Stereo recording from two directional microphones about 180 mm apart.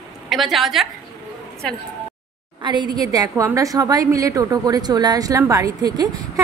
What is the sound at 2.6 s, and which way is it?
A woman's voice, 25° right (ahead or behind).